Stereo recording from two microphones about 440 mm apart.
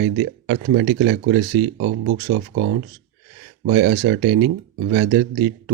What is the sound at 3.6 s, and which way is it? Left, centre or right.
Speech, right.